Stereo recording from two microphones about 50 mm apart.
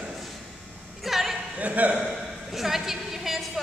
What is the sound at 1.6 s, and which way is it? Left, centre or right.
Speech, right.